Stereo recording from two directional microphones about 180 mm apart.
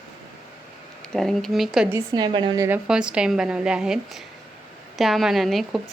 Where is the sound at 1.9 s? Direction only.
20° right (ahead or behind).